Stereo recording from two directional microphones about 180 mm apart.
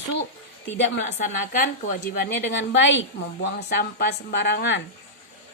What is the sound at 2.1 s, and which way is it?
A woman's voice, 65° left (ahead or behind).